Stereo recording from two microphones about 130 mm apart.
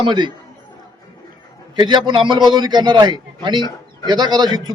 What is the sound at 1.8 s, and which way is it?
A man's voice, 35° right (ahead or behind).